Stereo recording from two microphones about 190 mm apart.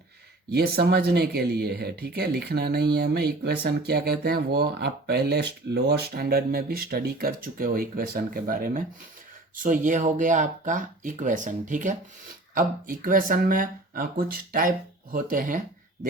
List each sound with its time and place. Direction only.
0.5 s speech: 55° right (ahead or behind)